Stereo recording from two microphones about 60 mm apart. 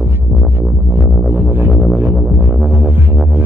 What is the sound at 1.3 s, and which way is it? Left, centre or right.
Music, right.